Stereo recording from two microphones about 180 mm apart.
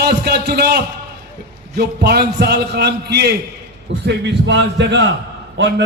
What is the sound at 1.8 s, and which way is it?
A man's voice, 65° right (ahead or behind).